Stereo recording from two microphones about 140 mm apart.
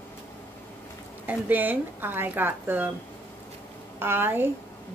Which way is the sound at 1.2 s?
10° right (ahead or behind).